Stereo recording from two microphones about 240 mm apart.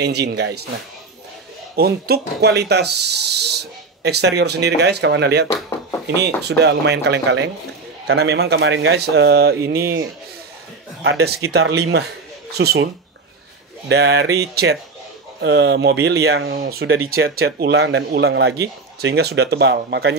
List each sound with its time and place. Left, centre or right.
0.0 s speech: right
1.8 s speech: right
5.5 s speech: centre
6.0 s speech: right
11.1 s speech: right